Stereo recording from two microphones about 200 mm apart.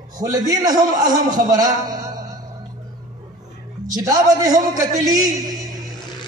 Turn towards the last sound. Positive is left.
turn(degrees=-20)  # may be behind; listen again after turning